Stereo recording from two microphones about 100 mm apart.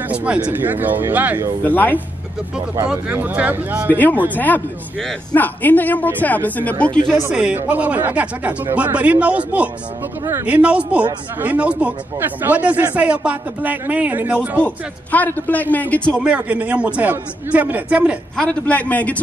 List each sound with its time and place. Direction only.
0.1 s speech: 15° right (ahead or behind)
1.6 s a man's voice: 20° left (ahead or behind)
3.1 s speech: 20° right (ahead or behind)
3.9 s a man's voice: 15° left (ahead or behind)
5.3 s a man's voice: 20° left (ahead or behind)
7.3 s speech: 10° right (ahead or behind)
14.6 s a man's voice: 15° left (ahead or behind)
16.2 s speech: 15° right (ahead or behind)
18.4 s a man's voice: 15° left (ahead or behind)